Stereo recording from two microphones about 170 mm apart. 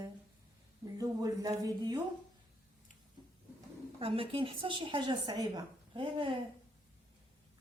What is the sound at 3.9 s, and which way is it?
A woman's voice, 35° right (ahead or behind).